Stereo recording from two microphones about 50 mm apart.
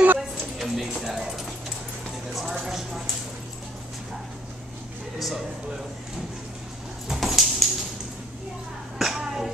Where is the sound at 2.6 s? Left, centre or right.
Centre.